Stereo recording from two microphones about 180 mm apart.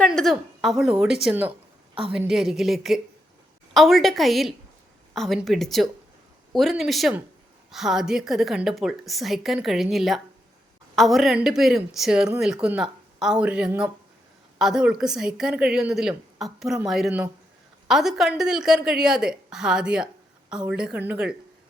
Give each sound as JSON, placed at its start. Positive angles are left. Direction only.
{"t": 0.0, "sound": "a woman's voice", "side_deg": 0}